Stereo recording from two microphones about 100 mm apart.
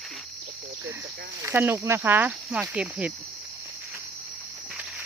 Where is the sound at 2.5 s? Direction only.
10° right (ahead or behind).